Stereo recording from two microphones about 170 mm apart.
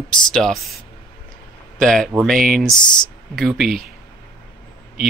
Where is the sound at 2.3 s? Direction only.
55° right (ahead or behind).